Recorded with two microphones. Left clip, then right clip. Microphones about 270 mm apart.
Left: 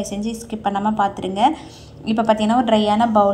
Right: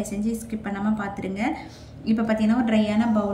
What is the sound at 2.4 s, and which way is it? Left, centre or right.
Speech, left.